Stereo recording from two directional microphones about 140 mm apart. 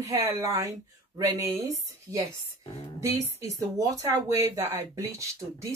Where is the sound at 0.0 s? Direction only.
25° right (ahead or behind).